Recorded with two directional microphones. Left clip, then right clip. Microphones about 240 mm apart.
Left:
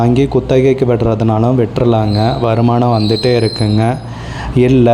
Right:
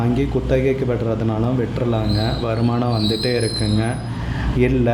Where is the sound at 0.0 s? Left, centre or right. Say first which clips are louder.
Left 9 dB; left.